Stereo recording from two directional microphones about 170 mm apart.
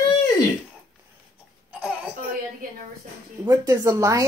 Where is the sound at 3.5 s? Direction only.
20° right (ahead or behind).